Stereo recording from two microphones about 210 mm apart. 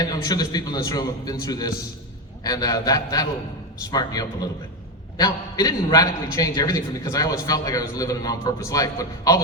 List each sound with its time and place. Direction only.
0.0 s a man's voice: 20° left (ahead or behind)